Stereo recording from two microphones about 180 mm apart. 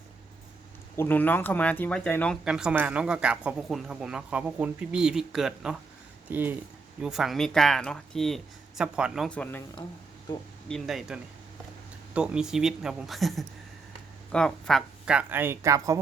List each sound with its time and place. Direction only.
0.9 s speech: 10° left (ahead or behind)
10.3 s speech: 20° left (ahead or behind)
10.7 s speech: centre (ahead or behind); by 16.0 s 15° right (ahead or behind)